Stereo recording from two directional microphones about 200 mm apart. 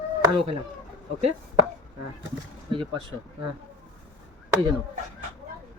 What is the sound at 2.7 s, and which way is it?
Speech, 25° right (ahead or behind).